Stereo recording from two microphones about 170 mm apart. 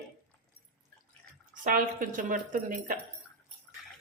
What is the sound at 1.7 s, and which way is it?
Speech, 55° right (ahead or behind).